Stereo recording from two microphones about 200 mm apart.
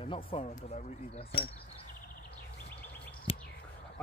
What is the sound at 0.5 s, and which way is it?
Speech, 35° left (ahead or behind).